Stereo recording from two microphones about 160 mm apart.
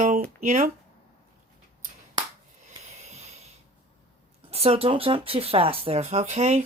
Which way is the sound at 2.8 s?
50° right (ahead or behind).